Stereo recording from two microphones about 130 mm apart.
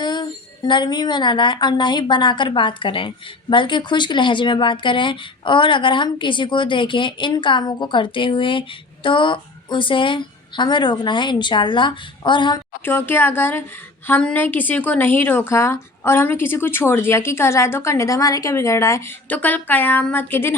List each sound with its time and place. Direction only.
0.0 s speech: 35° left (ahead or behind)
12.8 s a woman's voice: 15° left (ahead or behind)
19.3 s speech: 10° left (ahead or behind)